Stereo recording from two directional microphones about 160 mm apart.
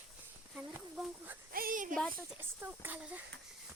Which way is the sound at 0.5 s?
10° right (ahead or behind).